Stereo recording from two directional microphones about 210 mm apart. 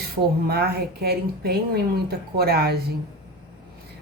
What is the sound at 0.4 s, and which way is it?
Speech, 50° right (ahead or behind).